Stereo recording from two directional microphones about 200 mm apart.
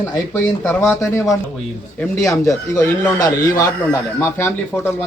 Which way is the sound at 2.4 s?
15° left (ahead or behind).